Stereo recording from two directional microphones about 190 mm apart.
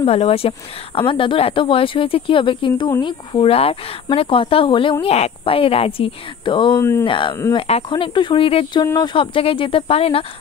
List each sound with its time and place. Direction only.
0.0 s speech: 30° left (ahead or behind)
6.8 s speech: 10° left (ahead or behind)
7.1 s speech: 25° left (ahead or behind)